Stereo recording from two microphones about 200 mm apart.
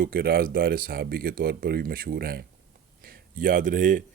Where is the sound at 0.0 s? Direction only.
50° right (ahead or behind).